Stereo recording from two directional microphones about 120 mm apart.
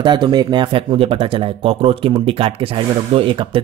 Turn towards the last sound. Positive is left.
turn(degrees=-45)  # may be behind; listen again after turning